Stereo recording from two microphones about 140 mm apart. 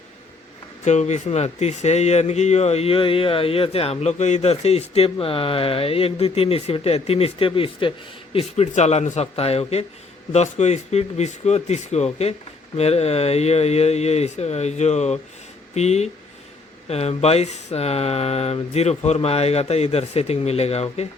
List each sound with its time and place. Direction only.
0.9 s speech: 55° left (ahead or behind)